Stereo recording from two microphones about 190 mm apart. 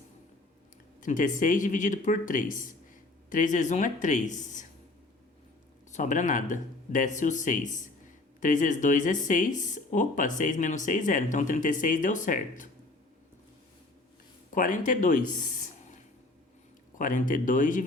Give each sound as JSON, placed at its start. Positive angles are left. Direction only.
{"t": 1.0, "sound": "speech", "side_deg": 45}
{"t": 5.9, "sound": "speech", "side_deg": 40}
{"t": 14.5, "sound": "speech", "side_deg": 45}
{"t": 17.0, "sound": "speech", "side_deg": 45}